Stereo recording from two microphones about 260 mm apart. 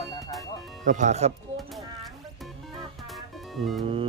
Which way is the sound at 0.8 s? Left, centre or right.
Right.